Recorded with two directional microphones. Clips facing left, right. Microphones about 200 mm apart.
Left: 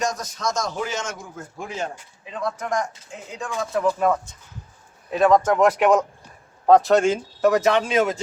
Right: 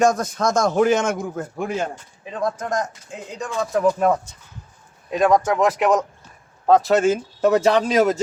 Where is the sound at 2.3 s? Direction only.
45° right (ahead or behind).